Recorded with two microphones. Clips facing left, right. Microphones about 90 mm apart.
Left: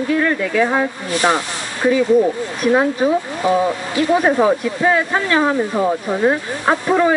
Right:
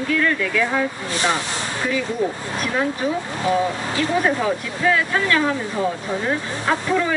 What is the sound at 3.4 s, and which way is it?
Speech, 20° left (ahead or behind).